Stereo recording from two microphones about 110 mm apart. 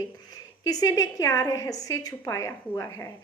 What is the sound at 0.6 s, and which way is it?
A woman's voice, 35° left (ahead or behind).